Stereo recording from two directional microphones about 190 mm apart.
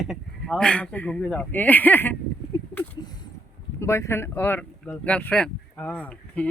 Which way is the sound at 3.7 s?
15° left (ahead or behind).